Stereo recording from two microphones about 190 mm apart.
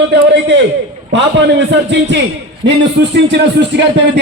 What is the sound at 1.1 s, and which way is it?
Speech, 70° right (ahead or behind).